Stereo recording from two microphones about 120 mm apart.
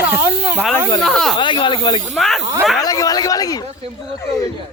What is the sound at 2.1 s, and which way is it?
Speech, centre (ahead or behind).